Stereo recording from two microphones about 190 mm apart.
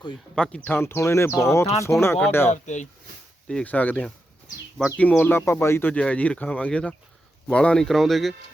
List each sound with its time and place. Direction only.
0.3 s speech: 5° left (ahead or behind)
2.5 s speech: 40° left (ahead or behind)
3.5 s speech: 10° left (ahead or behind)